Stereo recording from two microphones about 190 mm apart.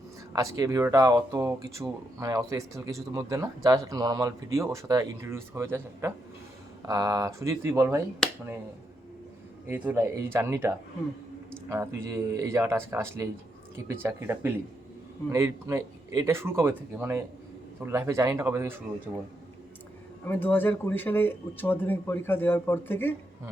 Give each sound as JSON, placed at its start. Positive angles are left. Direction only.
{"t": 0.3, "sound": "speech", "side_deg": -20}
{"t": 9.6, "sound": "speech", "side_deg": -10}
{"t": 11.7, "sound": "speech", "side_deg": -15}
{"t": 20.2, "sound": "speech", "side_deg": 10}